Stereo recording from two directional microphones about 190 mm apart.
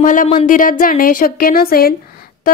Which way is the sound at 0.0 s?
45° left (ahead or behind).